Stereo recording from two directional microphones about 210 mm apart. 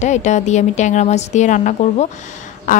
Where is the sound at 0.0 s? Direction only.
35° left (ahead or behind).